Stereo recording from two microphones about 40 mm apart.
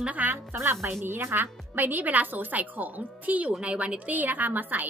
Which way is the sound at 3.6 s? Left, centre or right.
Right.